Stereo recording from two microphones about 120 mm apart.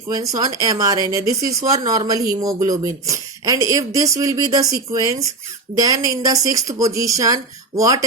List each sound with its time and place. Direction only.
0.1 s speech: 30° right (ahead or behind)